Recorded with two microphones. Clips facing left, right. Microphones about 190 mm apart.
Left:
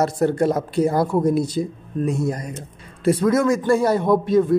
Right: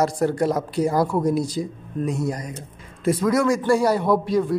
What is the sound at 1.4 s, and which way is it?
Speech, 60° left (ahead or behind).